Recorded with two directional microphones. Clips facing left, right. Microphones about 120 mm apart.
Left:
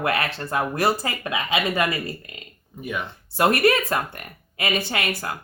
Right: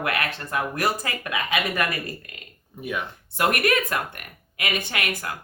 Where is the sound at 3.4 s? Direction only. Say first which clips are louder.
Left 4 dB; 30° left (ahead or behind).